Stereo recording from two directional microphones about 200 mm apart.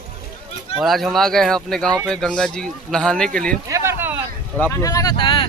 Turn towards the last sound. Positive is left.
turn(degrees=25)  # may be behind; listen again after turning